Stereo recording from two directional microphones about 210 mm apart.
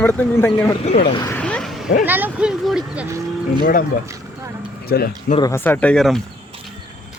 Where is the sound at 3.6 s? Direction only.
40° left (ahead or behind).